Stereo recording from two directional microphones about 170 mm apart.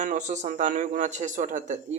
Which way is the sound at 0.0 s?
45° right (ahead or behind).